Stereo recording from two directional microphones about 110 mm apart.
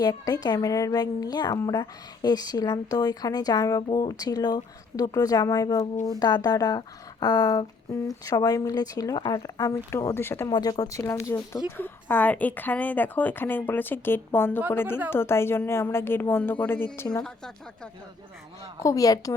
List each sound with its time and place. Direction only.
0.0 s speech: 35° left (ahead or behind)
10.5 s speech: 35° left (ahead or behind)
18.8 s speech: 30° left (ahead or behind)